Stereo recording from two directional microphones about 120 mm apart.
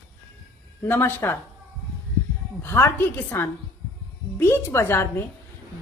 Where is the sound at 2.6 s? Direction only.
20° left (ahead or behind).